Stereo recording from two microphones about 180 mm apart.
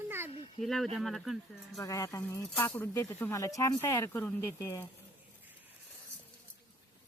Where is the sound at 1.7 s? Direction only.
15° left (ahead or behind).